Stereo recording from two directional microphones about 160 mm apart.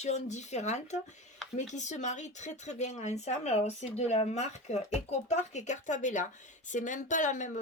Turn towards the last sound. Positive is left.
turn(degrees=50)  # may be behind; listen again after turning